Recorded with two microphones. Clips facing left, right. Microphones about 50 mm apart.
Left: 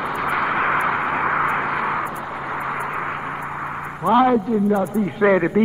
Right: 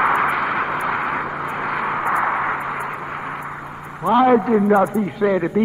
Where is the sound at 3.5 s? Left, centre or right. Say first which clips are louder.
Left 5 dB; left.